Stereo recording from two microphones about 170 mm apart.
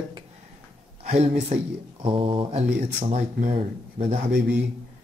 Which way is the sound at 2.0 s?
30° right (ahead or behind).